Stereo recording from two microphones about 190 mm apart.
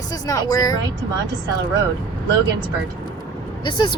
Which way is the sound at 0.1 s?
20° left (ahead or behind).